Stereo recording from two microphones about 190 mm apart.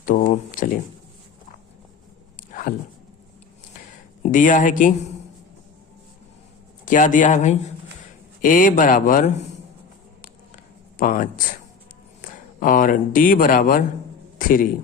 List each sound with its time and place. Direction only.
0.0 s a sound: 40° left (ahead or behind)
2.5 s a sound: 45° left (ahead or behind)
4.2 s speech: 45° left (ahead or behind)
6.8 s speech: 45° left (ahead or behind)
10.9 s speech: 45° left (ahead or behind)
12.5 s a man's voice: 45° left (ahead or behind)